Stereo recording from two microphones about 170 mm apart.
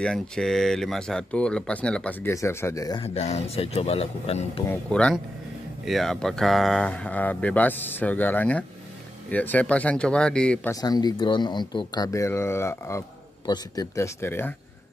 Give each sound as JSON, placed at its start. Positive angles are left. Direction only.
{"t": 0.0, "sound": "speech", "side_deg": 5}
{"t": 3.0, "sound": "speech", "side_deg": 40}
{"t": 4.6, "sound": "speech", "side_deg": 5}
{"t": 10.7, "sound": "speech", "side_deg": 25}